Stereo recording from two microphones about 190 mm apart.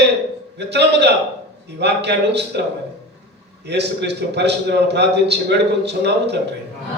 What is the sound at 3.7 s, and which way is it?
A man's voice, 60° right (ahead or behind).